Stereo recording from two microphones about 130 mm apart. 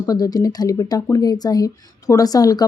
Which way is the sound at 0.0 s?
30° left (ahead or behind).